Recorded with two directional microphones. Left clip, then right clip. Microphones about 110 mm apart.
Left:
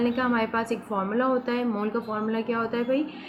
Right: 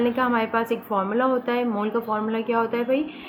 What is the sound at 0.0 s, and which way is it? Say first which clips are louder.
A woman's voice: right 3 dB; 40° right (ahead or behind).